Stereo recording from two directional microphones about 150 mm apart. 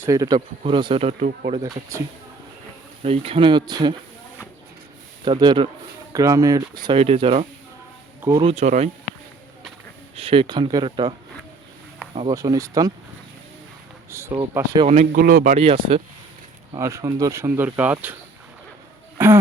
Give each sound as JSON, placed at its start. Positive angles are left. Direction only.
{"t": 0.0, "sound": "speech", "side_deg": -25}
{"t": 1.6, "sound": "speech", "side_deg": -25}
{"t": 3.0, "sound": "speech", "side_deg": -40}
{"t": 5.2, "sound": "speech", "side_deg": -30}
{"t": 7.0, "sound": "speech", "side_deg": -40}
{"t": 8.6, "sound": "speech", "side_deg": -50}
{"t": 10.2, "sound": "speech", "side_deg": -40}
{"t": 12.3, "sound": "speech", "side_deg": -20}
{"t": 14.1, "sound": "speech", "side_deg": -20}
{"t": 15.1, "sound": "speech", "side_deg": -85}
{"t": 15.4, "sound": "speech", "side_deg": -40}
{"t": 16.7, "sound": "speech", "side_deg": -20}
{"t": 19.2, "sound": "speech", "side_deg": -15}